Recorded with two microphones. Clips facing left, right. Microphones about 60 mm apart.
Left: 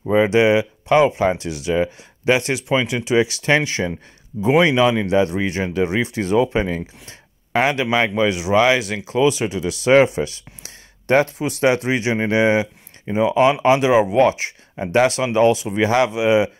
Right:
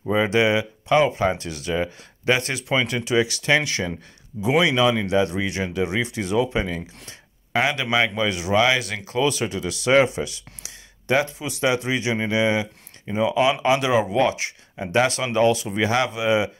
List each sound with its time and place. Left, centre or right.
0.0 s speech: left